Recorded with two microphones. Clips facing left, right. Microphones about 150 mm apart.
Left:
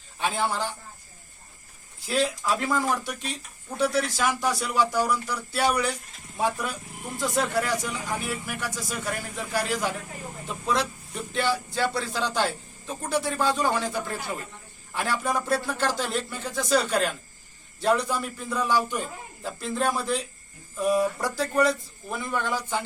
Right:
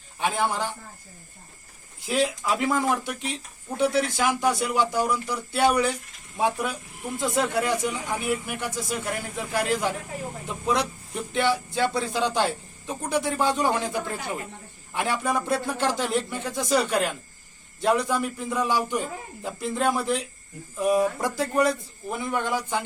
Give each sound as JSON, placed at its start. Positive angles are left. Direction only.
{"t": 0.2, "sound": "speech", "side_deg": -15}
{"t": 2.0, "sound": "speech", "side_deg": -15}
{"t": 15.2, "sound": "speech", "side_deg": 0}
{"t": 15.4, "sound": "speech", "side_deg": -20}